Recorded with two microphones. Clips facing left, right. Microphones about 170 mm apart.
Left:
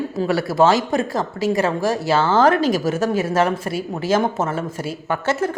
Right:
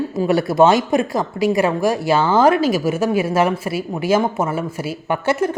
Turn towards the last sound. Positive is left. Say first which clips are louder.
# right 2 dB
turn(degrees=-15)  # may be behind; listen again after turning